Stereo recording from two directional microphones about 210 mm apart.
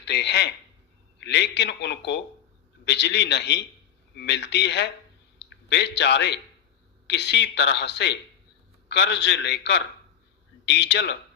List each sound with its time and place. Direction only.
0.0 s speech: 55° left (ahead or behind)